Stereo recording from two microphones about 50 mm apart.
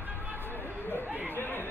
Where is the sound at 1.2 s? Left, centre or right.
Left.